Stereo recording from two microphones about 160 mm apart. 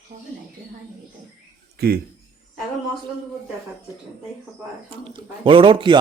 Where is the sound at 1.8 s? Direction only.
70° right (ahead or behind).